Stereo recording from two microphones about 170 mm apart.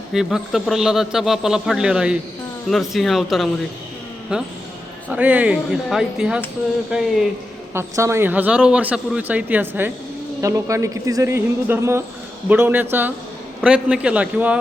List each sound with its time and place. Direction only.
0.1 s a man's voice: centre (ahead or behind)
7.7 s speech: 15° right (ahead or behind)